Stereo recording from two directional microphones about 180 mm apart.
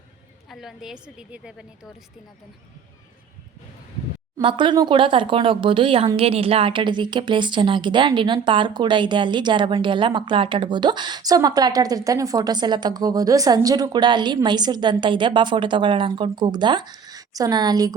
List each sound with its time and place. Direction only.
0.5 s a woman's voice: centre (ahead or behind)
4.4 s a woman's voice: 25° right (ahead or behind)